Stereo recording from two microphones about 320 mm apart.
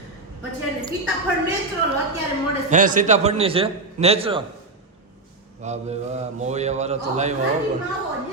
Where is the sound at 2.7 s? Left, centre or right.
Right.